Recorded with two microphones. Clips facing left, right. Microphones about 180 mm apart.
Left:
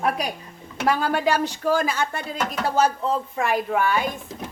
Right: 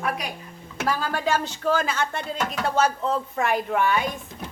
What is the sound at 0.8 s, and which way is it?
Speech, 15° left (ahead or behind).